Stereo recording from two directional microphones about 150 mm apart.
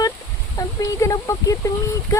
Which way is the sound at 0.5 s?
25° left (ahead or behind).